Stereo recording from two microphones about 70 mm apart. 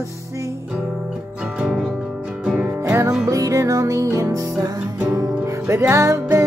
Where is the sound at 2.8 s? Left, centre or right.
Right.